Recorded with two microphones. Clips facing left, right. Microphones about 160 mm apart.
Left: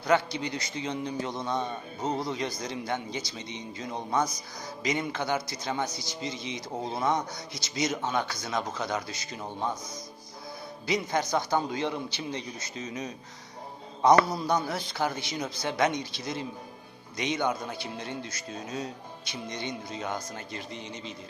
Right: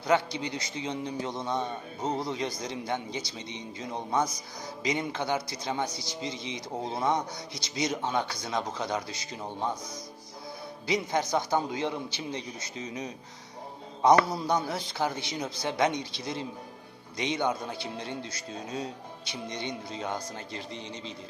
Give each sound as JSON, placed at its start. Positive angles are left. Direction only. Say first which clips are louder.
{"t": 0.0, "sound": "speech", "louder": "left 1 dB", "side_deg": -20}
{"t": 10.8, "sound": "speech", "louder": "even", "side_deg": -25}
{"t": 14.0, "sound": "speech", "louder": "left 1 dB", "side_deg": -25}